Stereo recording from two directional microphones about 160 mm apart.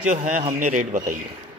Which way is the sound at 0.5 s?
55° right (ahead or behind).